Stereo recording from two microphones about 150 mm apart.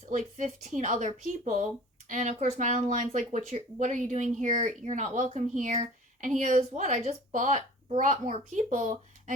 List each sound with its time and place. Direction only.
0.1 s speech: 55° right (ahead or behind)